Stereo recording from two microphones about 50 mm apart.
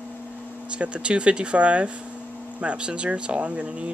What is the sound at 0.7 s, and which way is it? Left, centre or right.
Speech, right.